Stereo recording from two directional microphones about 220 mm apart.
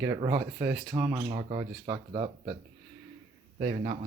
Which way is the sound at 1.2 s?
25° right (ahead or behind).